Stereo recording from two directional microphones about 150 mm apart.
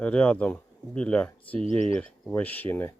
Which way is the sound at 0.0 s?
5° left (ahead or behind).